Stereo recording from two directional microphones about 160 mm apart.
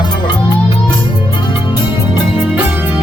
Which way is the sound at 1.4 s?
30° left (ahead or behind).